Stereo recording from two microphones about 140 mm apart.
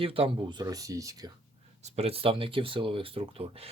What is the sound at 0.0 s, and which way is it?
Speech, 40° right (ahead or behind).